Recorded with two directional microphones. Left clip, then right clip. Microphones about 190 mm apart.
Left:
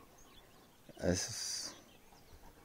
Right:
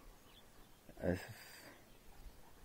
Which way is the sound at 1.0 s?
10° left (ahead or behind).